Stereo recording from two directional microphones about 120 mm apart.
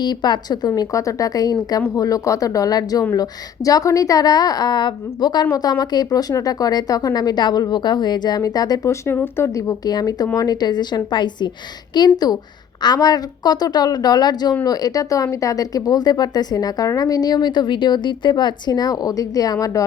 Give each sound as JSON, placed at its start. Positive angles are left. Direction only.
{"t": 0.0, "sound": "a woman's voice", "side_deg": 35}